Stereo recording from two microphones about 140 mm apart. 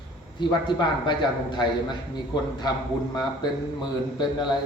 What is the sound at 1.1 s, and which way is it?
Speech, 35° left (ahead or behind).